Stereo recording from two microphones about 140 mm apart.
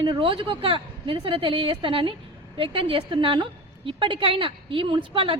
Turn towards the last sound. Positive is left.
turn(degrees=-40)  # may be behind; listen again after turning